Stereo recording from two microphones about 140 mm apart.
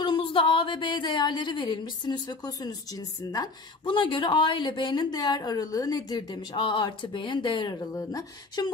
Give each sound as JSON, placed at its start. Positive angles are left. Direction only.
{"t": 0.0, "sound": "speech", "side_deg": 40}